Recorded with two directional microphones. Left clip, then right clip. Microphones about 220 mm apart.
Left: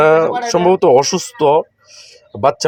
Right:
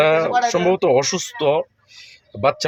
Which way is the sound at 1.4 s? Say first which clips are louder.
Left 6 dB; 10° left (ahead or behind).